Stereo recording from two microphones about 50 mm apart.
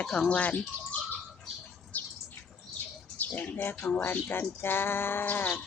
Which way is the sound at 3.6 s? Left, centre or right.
Left.